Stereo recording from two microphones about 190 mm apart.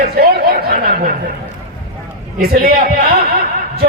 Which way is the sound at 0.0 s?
50° right (ahead or behind).